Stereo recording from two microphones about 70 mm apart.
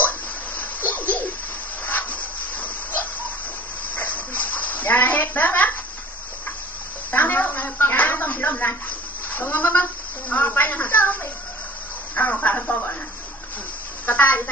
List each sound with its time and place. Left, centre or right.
0.0 s bathtub: left
0.9 s a sound: left
2.6 s dog: left
7.1 s a sound: left
7.9 s speech: left
14.1 s speech: left